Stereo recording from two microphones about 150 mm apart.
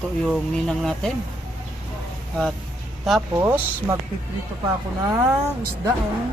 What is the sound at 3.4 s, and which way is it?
Speech, 15° right (ahead or behind).